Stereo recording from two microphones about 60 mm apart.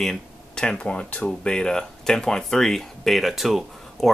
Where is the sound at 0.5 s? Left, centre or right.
Centre.